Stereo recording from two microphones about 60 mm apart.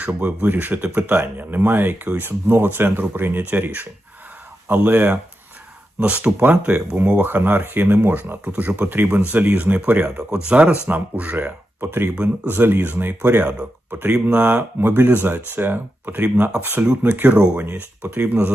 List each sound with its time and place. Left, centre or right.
0.0 s speech: right
14.8 s speech: right